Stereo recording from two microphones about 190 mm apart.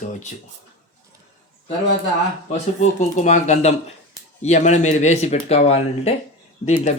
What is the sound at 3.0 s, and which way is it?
Speech, 40° left (ahead or behind).